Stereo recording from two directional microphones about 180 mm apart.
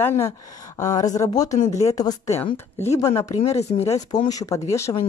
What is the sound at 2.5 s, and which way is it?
Speech, 35° left (ahead or behind).